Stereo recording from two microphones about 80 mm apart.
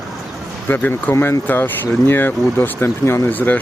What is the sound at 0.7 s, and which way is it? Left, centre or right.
Speech, left.